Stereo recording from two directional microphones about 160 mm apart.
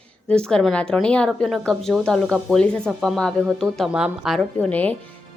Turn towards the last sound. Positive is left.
turn(degrees=10)  # may be behind; listen again after turning